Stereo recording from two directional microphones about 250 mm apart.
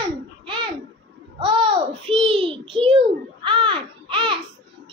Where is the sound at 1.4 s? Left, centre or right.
Right.